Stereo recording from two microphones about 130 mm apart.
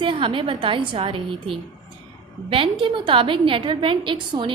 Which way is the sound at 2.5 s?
40° right (ahead or behind).